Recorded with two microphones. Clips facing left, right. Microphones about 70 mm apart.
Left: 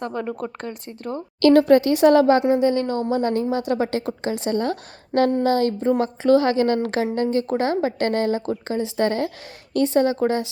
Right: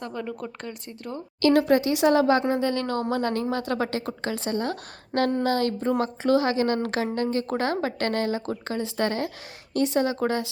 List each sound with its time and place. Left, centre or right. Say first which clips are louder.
0.0 s speech: left 5 dB; left
1.4 s speech: left 6 dB; left
2.6 s a woman's voice: left 6 dB; centre
2.9 s speech: left 3 dB; right
3.2 s a woman's voice: left 4 dB; left
6.2 s speech: left 5 dB; left
7.3 s a woman's voice: left 5 dB; right
7.8 s a woman's voice: left 5 dB; left